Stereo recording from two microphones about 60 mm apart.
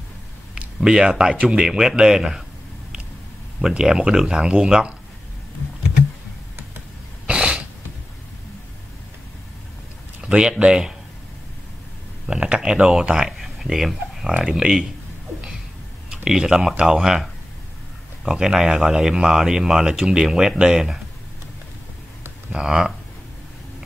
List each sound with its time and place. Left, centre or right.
0.7 s speech: centre
3.6 s speech: centre
7.2 s cough: centre
10.2 s speech: centre
12.3 s speech: centre
13.4 s a sound: centre
14.4 s speech: centre
16.1 s speech: centre
22.5 s speech: centre